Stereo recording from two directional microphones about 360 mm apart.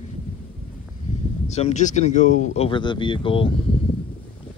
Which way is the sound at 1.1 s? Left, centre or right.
Centre.